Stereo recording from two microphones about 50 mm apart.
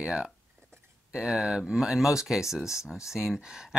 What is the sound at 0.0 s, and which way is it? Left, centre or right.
Speech, centre.